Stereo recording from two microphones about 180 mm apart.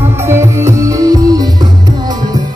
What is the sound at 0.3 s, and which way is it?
Music, 15° right (ahead or behind).